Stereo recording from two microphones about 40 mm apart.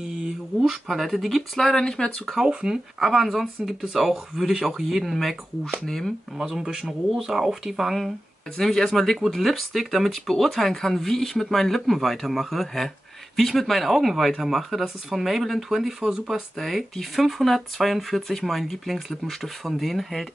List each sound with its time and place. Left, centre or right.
0.8 s speech: centre
2.3 s speech: centre
3.0 s speech: centre
3.6 s speech: centre
6.3 s speech: centre
6.6 s speech: centre
8.5 s speech: centre
9.2 s speech: centre